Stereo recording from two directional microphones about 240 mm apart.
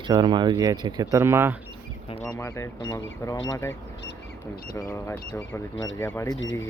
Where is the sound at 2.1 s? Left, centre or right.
Centre.